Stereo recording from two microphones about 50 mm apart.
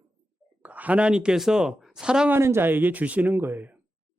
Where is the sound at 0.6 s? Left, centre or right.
Right; by 2.3 s centre.